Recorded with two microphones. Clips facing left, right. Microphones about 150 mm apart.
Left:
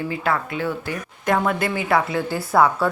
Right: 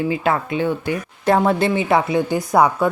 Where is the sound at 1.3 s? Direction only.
30° right (ahead or behind).